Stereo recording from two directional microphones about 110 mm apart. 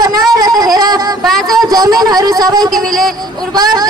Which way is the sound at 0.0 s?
35° right (ahead or behind).